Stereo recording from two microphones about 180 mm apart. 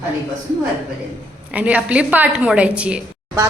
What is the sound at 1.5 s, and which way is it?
A woman's voice, 5° right (ahead or behind).